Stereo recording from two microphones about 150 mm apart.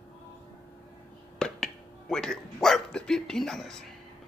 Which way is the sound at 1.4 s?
5° left (ahead or behind).